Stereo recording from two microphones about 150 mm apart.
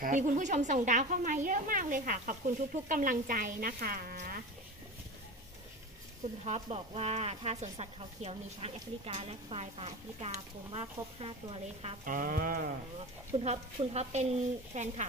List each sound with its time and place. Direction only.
0.0 s a woman's voice: 55° right (ahead or behind); by 4.2 s 75° right (ahead or behind)
6.4 s speech: 45° right (ahead or behind)
12.0 s a sound: 65° right (ahead or behind)
13.4 s speech: 45° right (ahead or behind)